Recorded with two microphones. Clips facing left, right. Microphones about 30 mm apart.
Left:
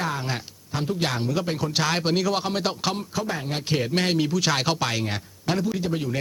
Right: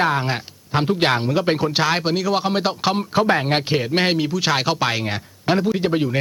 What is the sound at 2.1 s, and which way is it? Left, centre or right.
Speech, centre.